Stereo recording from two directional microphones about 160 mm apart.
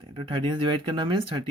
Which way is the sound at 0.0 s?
30° right (ahead or behind).